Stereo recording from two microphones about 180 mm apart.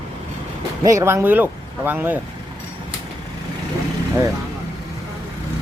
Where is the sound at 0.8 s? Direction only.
15° right (ahead or behind).